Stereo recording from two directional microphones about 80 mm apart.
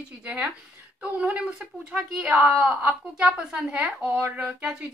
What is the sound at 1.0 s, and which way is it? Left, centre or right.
A woman's voice, centre.